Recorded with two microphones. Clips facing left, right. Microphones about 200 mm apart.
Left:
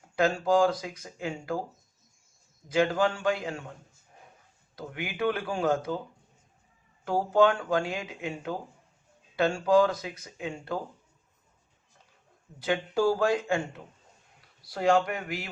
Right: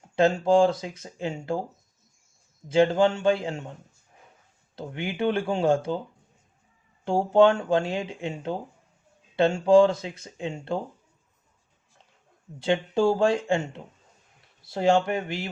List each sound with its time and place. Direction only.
0.2 s speech: 25° right (ahead or behind)
2.6 s speech: 25° right (ahead or behind)
7.0 s speech: 25° right (ahead or behind)
12.5 s speech: 25° right (ahead or behind)